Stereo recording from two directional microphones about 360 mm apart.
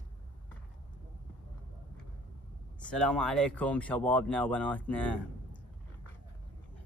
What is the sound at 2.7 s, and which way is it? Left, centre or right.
Speech, centre.